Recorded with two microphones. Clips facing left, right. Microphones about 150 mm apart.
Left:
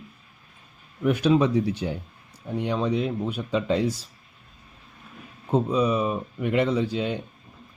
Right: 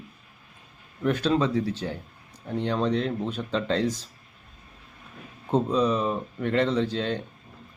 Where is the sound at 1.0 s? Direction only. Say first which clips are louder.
Left 3 dB; 10° left (ahead or behind).